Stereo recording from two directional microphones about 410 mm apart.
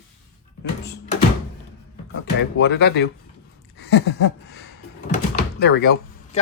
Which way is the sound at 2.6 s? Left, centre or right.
Left.